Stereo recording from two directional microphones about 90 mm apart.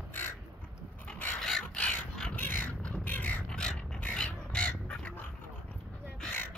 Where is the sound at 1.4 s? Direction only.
10° left (ahead or behind).